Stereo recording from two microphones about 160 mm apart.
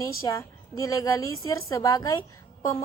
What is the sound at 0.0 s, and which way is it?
A woman's voice, 20° left (ahead or behind).